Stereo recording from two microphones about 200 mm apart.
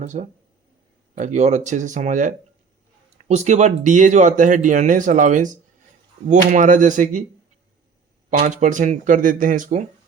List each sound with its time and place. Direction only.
0.0 s speech: 35° right (ahead or behind)
8.3 s speech: 40° right (ahead or behind)